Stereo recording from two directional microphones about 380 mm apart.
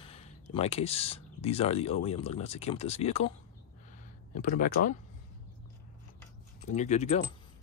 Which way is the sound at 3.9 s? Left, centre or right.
Left.